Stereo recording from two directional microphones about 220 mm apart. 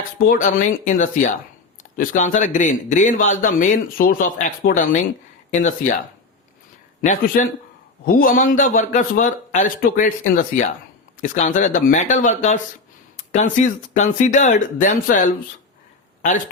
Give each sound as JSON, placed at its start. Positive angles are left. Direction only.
{"t": 0.3, "sound": "a man's voice", "side_deg": 35}
{"t": 7.0, "sound": "a man's voice", "side_deg": 35}